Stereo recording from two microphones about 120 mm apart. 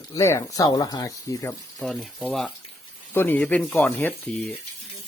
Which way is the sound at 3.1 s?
15° left (ahead or behind).